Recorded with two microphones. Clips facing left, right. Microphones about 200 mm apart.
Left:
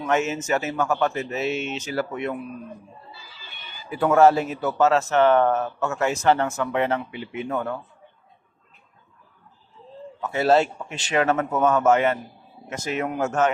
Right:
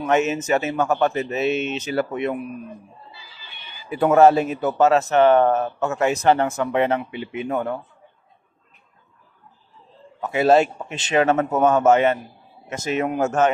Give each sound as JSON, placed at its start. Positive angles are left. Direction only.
{"t": 0.0, "sound": "speech", "side_deg": -20}
{"t": 3.1, "sound": "a sound", "side_deg": 45}
{"t": 3.9, "sound": "speech", "side_deg": -20}
{"t": 10.2, "sound": "speech", "side_deg": -15}